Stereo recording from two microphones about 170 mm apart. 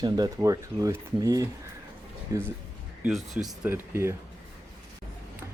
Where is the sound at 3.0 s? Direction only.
Centre (ahead or behind).